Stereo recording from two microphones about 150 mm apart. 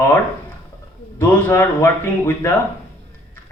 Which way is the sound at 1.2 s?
15° left (ahead or behind).